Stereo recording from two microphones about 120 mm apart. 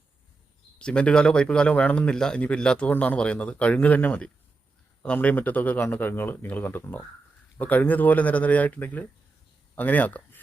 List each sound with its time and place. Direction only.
0.8 s speech: 10° left (ahead or behind)